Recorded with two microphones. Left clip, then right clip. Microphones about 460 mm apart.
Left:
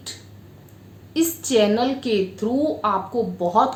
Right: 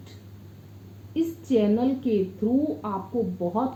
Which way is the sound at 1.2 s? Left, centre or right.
Centre.